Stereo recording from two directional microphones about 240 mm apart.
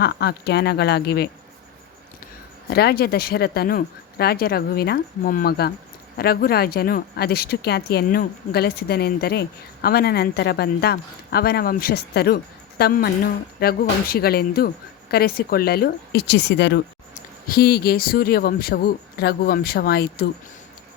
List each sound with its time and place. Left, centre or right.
0.0 s speech: left